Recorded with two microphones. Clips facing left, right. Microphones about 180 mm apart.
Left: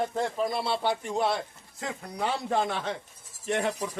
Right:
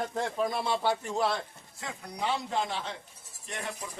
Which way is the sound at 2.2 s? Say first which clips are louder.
Left 3 dB; 50° left (ahead or behind).